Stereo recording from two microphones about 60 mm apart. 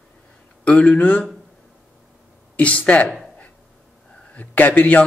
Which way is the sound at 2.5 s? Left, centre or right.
Left.